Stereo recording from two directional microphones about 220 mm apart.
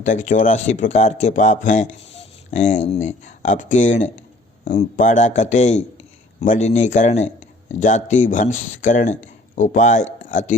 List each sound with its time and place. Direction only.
0.0 s a man's voice: 35° left (ahead or behind)